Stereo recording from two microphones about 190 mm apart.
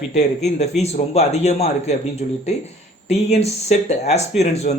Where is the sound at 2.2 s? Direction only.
45° left (ahead or behind).